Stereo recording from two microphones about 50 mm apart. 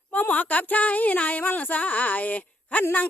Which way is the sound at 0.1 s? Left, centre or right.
Left.